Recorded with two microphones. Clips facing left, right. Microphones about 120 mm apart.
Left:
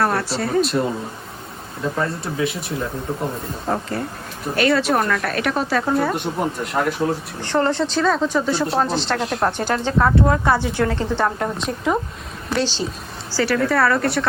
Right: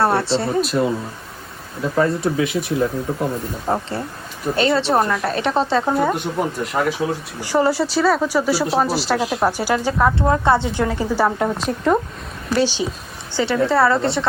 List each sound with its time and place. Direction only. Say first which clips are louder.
0.0 s speech: right 3 dB; 30° right (ahead or behind)
0.6 s speech: right 1 dB; centre (ahead or behind)
2.2 s speech: right 4 dB; centre (ahead or behind)
3.7 s a woman's voice: right 1 dB; 25° right (ahead or behind)
6.1 s speech: right 1 dB; centre (ahead or behind)
10.2 s a woman's voice: right 1 dB; 20° right (ahead or behind); by 11.9 s centre (ahead or behind)
12.5 s a woman's voice: right 3 dB; 10° right (ahead or behind)